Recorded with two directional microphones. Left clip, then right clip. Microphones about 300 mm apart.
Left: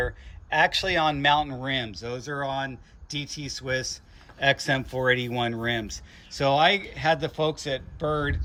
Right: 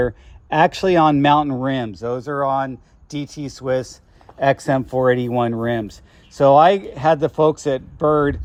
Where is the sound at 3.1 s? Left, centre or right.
Right.